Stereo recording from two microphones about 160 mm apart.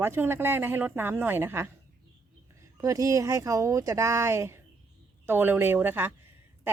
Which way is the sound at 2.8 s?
20° right (ahead or behind).